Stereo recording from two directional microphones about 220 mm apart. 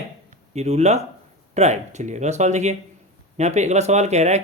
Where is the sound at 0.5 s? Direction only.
30° right (ahead or behind).